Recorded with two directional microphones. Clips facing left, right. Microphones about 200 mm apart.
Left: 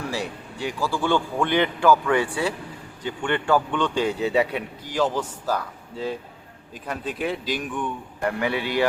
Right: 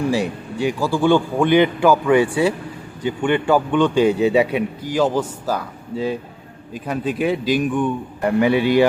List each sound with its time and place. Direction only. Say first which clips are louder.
0.0 s a man's voice: right 9 dB; 15° right (ahead or behind)